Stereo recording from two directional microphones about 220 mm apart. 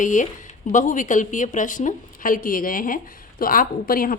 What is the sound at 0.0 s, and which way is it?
Speech, 35° left (ahead or behind).